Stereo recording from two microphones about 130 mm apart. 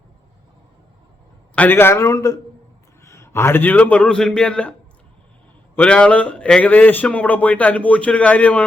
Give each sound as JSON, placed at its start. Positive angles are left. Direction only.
{"t": 1.5, "sound": "a man's voice", "side_deg": 15}
{"t": 5.7, "sound": "speech", "side_deg": 10}